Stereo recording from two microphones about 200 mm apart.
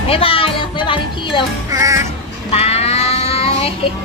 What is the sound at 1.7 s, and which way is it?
Music, 15° right (ahead or behind).